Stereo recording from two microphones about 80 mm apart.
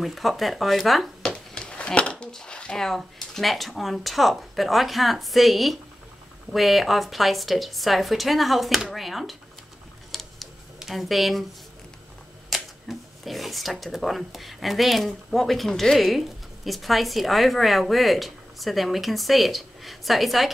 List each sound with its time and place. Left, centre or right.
0.0 s speech: centre
10.1 s tick-tock: centre
12.4 s speech: centre